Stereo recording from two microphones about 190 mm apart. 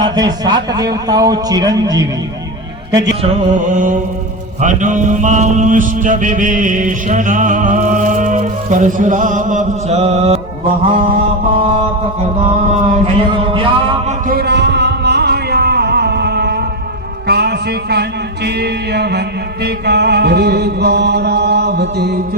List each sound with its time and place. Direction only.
0.0 s speech: 20° right (ahead or behind)
3.2 s mantra: 45° right (ahead or behind)
12.9 s speech: 25° right (ahead or behind)
14.3 s a sound: 55° right (ahead or behind)
17.2 s music: 60° right (ahead or behind)
18.4 s chant: 60° right (ahead or behind)